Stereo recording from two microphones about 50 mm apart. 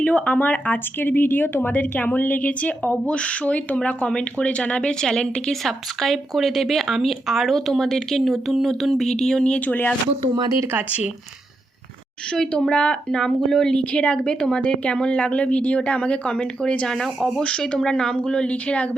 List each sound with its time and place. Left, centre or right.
0.0 s speech: left; by 8.7 s centre
8.8 s a sound: centre
9.1 s speech: centre
9.6 s speech: left
12.3 s speech: centre
13.7 s speech: left